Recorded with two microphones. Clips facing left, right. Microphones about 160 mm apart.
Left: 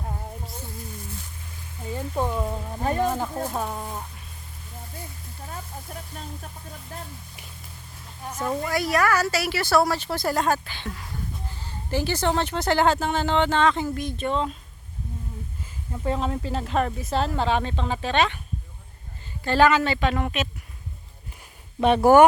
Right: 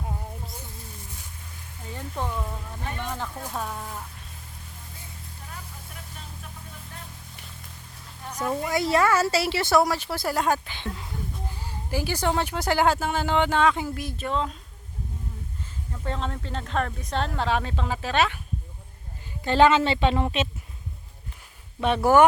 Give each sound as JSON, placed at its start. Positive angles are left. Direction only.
{"t": 2.3, "sound": "speech", "side_deg": 30}
{"t": 3.5, "sound": "speech", "side_deg": 20}
{"t": 5.5, "sound": "a sound", "side_deg": 40}
{"t": 8.7, "sound": "a woman's voice", "side_deg": -25}
{"t": 11.6, "sound": "a sound", "side_deg": -10}
{"t": 12.4, "sound": "speech", "side_deg": -10}
{"t": 16.0, "sound": "speech", "side_deg": 10}
{"t": 19.5, "sound": "a woman's voice", "side_deg": -20}
{"t": 21.9, "sound": "speech", "side_deg": 45}